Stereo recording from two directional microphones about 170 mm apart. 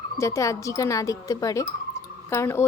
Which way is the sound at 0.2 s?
20° left (ahead or behind).